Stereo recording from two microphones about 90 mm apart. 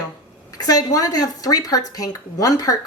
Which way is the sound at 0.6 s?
45° left (ahead or behind).